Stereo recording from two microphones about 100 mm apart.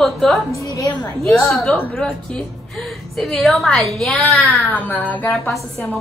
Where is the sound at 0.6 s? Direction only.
35° left (ahead or behind).